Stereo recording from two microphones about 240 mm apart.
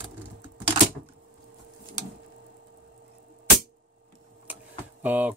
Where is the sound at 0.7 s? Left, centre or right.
Right.